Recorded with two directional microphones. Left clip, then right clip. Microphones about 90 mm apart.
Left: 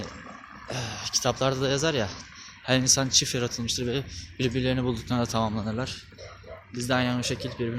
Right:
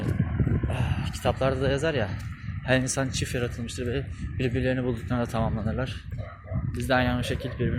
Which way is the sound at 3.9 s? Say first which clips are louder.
Left 1 dB; 70° left (ahead or behind).